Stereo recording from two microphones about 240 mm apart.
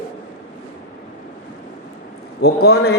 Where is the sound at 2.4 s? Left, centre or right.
Left.